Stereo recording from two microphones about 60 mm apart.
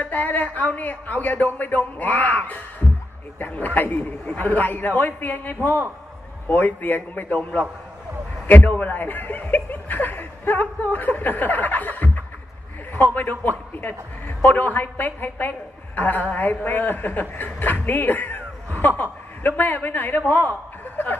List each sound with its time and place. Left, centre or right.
0.0 s speech: left
8.8 s speech: left